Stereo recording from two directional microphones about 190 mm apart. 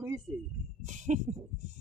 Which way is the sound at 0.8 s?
40° right (ahead or behind).